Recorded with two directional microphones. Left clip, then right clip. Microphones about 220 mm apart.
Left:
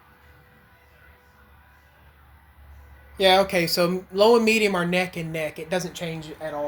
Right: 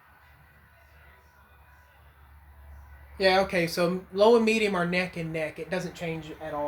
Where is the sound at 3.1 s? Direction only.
35° left (ahead or behind).